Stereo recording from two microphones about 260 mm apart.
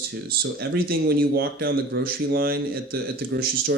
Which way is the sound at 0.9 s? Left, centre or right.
Right.